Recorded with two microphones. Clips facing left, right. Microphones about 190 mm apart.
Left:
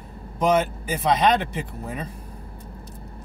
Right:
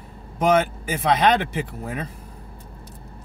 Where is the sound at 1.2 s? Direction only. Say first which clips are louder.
Right 1 dB; 75° right (ahead or behind).